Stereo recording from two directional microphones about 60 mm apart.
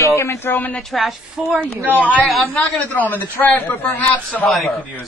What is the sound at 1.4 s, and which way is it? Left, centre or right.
Speech, centre.